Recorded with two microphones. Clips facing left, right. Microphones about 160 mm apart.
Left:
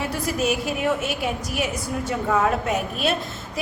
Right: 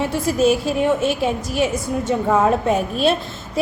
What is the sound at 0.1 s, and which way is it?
A woman's voice, 30° right (ahead or behind).